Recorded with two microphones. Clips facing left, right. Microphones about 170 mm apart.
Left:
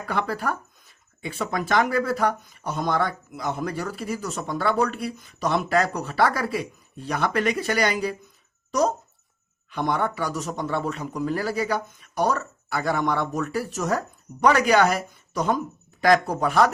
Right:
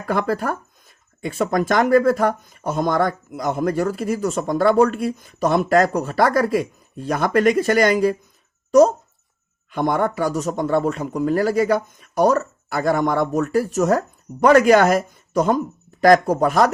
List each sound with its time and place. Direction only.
0.0 s speech: 45° right (ahead or behind)
9.6 s speech: 45° right (ahead or behind)